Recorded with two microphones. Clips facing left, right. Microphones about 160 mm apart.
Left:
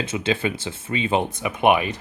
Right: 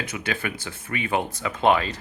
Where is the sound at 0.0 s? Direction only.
25° left (ahead or behind).